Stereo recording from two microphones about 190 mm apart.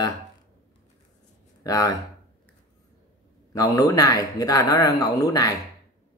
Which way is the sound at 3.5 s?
20° left (ahead or behind).